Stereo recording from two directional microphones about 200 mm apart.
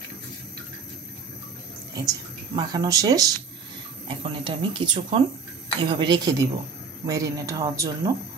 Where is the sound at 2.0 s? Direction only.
20° right (ahead or behind).